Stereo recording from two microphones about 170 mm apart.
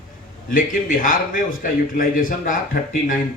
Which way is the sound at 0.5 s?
55° left (ahead or behind).